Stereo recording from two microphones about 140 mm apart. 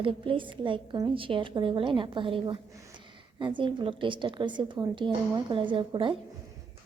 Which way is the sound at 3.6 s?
35° right (ahead or behind).